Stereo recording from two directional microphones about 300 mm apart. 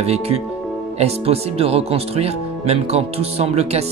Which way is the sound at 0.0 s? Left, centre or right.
Right.